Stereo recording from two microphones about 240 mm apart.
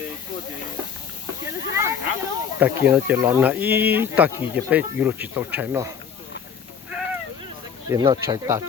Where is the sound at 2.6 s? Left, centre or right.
Centre.